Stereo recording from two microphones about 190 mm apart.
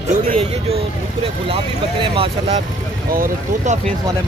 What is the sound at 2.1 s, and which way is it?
Speech, 30° right (ahead or behind).